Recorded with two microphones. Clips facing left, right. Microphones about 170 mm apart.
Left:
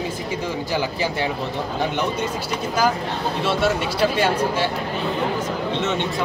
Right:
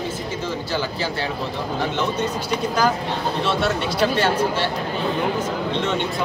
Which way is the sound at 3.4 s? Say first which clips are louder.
Left 3 dB; 10° left (ahead or behind).